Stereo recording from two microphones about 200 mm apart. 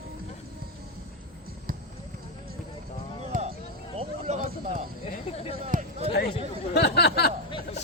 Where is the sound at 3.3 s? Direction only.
45° right (ahead or behind).